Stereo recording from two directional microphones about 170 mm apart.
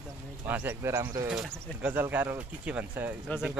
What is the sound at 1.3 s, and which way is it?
Speech, 5° right (ahead or behind).